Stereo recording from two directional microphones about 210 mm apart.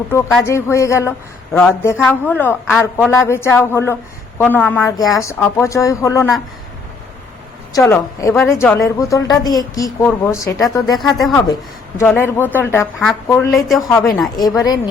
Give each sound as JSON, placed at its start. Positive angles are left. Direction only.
{"t": 0.1, "sound": "a woman's voice", "side_deg": 10}
{"t": 7.9, "sound": "a woman's voice", "side_deg": 10}